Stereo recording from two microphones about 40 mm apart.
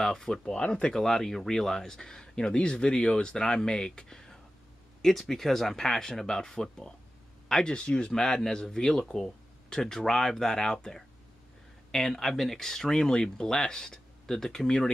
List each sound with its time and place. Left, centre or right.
0.0 s speech: centre
0.6 s speech: left
0.9 s speech: centre
7.7 s speech: left
8.1 s speech: centre